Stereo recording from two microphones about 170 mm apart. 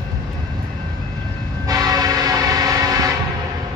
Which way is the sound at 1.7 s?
20° right (ahead or behind).